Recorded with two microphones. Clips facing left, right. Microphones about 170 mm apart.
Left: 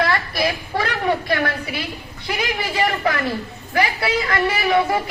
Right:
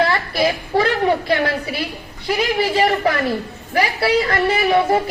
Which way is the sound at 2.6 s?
25° right (ahead or behind).